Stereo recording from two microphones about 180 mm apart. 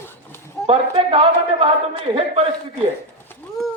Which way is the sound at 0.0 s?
10° left (ahead or behind).